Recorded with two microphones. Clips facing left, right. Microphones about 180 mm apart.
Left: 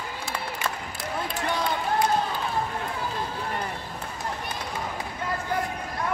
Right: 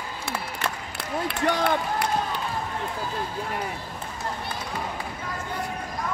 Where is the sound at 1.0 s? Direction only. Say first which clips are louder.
Right 4 dB; 65° right (ahead or behind).